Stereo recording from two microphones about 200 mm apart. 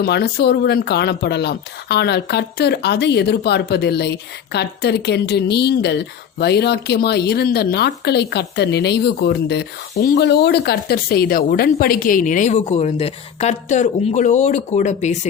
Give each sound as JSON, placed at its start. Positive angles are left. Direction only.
{"t": 0.0, "sound": "speech", "side_deg": 55}